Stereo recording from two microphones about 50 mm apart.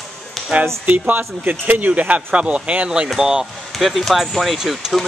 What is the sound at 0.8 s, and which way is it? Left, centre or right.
Speech, right.